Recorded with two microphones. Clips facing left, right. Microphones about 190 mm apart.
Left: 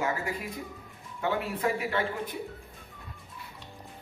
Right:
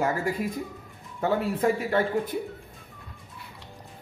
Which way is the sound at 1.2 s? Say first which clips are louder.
Right 5 dB; 40° right (ahead or behind).